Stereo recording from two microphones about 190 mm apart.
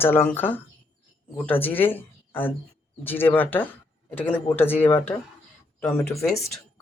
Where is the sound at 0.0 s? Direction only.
10° left (ahead or behind).